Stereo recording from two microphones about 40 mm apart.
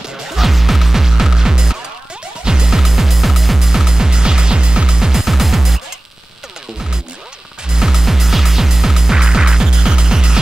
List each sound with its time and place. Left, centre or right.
0.4 s music: centre
7.7 s music: centre